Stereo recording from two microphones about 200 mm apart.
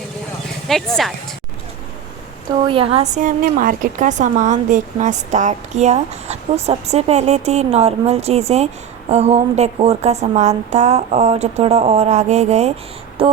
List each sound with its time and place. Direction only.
0.7 s speech: centre (ahead or behind)
2.6 s speech: 25° right (ahead or behind)
13.2 s a sound: 30° right (ahead or behind)